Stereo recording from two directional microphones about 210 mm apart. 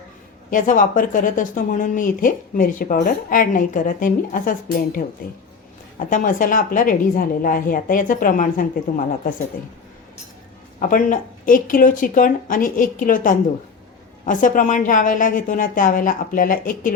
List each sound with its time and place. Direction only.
0.5 s speech: 40° left (ahead or behind)
10.8 s speech: 40° left (ahead or behind)